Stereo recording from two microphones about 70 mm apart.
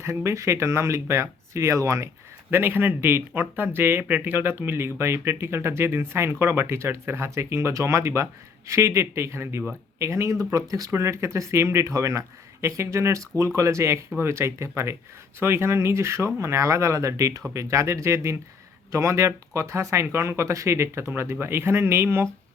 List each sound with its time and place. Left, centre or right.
0.0 s speech: right
2.5 s speech: right
10.9 s speech: right
21.1 s speech: right